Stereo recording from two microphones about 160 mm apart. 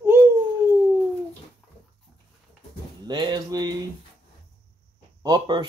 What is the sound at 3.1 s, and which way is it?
Speech, 25° right (ahead or behind).